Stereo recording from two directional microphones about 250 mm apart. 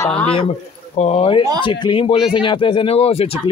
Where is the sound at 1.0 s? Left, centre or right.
Left.